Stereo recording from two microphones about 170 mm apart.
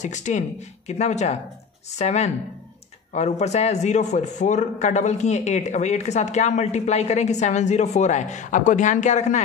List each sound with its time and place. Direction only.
0.0 s a man's voice: 45° left (ahead or behind)